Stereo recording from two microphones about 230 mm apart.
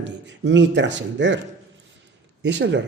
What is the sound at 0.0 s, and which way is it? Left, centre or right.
Speech, right.